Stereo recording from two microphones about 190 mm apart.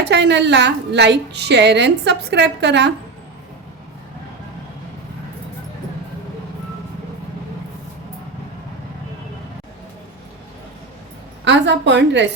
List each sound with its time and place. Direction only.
0.1 s a woman's voice: 65° right (ahead or behind)
11.4 s a woman's voice: 70° right (ahead or behind)